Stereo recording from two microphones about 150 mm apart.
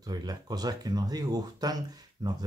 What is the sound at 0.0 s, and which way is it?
Speech, 25° right (ahead or behind).